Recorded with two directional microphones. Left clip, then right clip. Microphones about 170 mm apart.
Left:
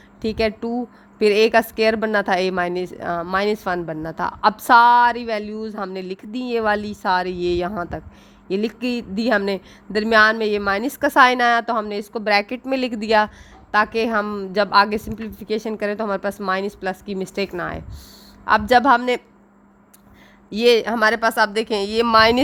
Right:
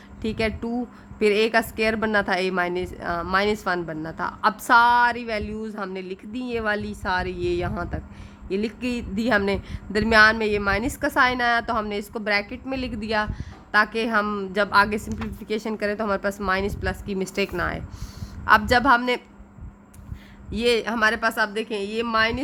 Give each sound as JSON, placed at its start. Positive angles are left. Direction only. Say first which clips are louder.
{"t": 0.2, "sound": "a woman's voice", "louder": "left 5 dB", "side_deg": 30}
{"t": 14.3, "sound": "a woman's voice", "louder": "even", "side_deg": 20}
{"t": 14.5, "sound": "a woman's voice", "louder": "left 4 dB", "side_deg": 35}
{"t": 20.5, "sound": "speech", "louder": "left 6 dB", "side_deg": 40}